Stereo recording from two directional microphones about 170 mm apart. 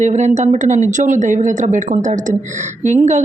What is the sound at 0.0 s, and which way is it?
A woman's voice, 40° right (ahead or behind).